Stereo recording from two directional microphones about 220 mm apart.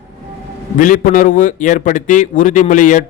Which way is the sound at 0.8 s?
40° left (ahead or behind).